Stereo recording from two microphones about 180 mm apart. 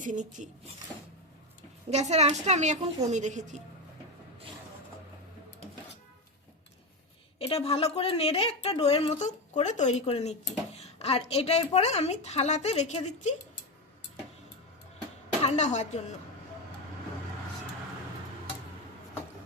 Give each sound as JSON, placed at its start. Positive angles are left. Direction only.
{"t": 0.0, "sound": "speech", "side_deg": -45}
{"t": 1.9, "sound": "a woman's voice", "side_deg": -40}
{"t": 7.3, "sound": "a woman's voice", "side_deg": 35}
{"t": 15.4, "sound": "a woman's voice", "side_deg": 40}